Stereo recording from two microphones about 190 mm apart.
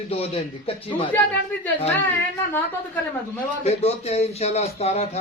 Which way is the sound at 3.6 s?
35° left (ahead or behind).